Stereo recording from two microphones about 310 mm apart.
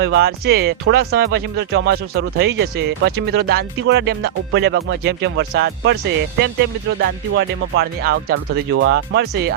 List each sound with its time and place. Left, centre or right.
0.0 s speech: right